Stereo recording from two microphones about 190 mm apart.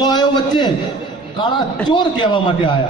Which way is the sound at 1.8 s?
25° left (ahead or behind).